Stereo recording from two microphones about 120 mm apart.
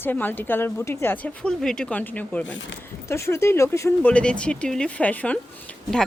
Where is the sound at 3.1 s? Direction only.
25° left (ahead or behind).